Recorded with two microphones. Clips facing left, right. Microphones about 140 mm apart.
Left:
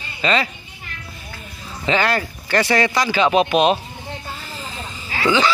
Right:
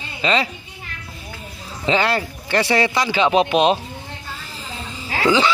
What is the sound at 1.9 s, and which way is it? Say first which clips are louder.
Speech: even; 25° right (ahead or behind).